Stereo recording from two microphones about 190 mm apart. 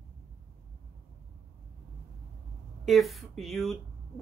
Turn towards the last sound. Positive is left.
turn(degrees=0)  # may be behind; listen again after turning